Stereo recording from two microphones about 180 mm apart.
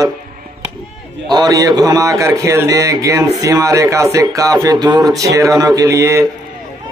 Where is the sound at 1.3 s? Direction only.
20° right (ahead or behind).